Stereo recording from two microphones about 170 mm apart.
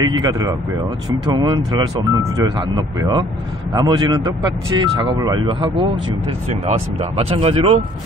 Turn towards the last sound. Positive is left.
turn(degrees=-35)  # may be behind; listen again after turning